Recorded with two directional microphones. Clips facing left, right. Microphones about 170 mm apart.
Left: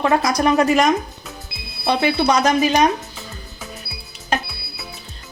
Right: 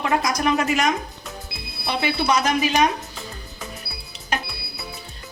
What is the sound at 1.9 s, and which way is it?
Speech, 35° left (ahead or behind).